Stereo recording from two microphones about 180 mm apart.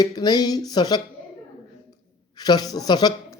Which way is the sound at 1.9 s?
20° left (ahead or behind).